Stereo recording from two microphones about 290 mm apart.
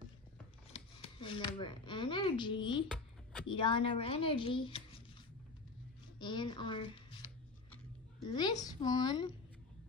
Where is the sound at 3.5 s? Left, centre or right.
Centre.